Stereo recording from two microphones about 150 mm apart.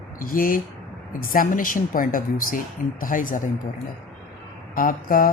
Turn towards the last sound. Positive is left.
turn(degrees=65)  # may be behind; listen again after turning